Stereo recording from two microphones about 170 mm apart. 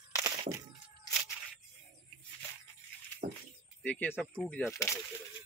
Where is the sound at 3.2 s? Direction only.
50° right (ahead or behind).